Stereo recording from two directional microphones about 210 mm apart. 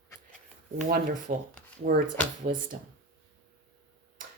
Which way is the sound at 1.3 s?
40° right (ahead or behind).